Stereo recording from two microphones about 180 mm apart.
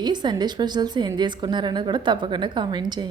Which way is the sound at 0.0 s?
25° right (ahead or behind).